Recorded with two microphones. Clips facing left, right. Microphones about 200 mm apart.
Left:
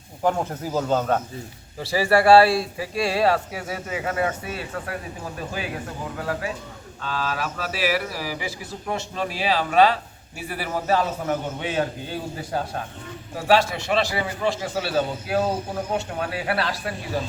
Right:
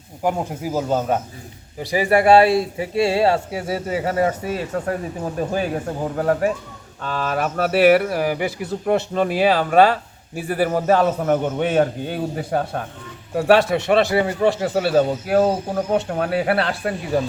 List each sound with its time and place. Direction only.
0.2 s a man's voice: 10° right (ahead or behind); by 16.9 s 55° right (ahead or behind)